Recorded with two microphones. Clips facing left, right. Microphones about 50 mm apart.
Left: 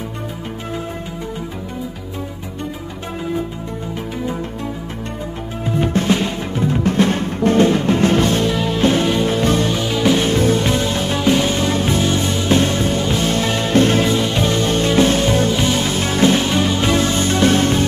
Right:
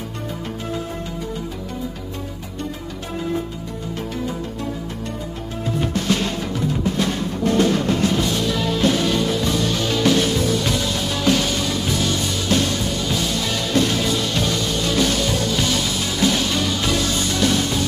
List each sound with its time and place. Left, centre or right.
5.8 s music: left
6.8 s music: left
8.1 s music: left
8.5 s music: left
9.7 s music: centre
10.2 s music: left